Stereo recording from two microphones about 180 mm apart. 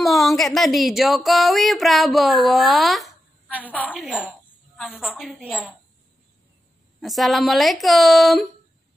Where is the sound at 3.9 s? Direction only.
5° right (ahead or behind).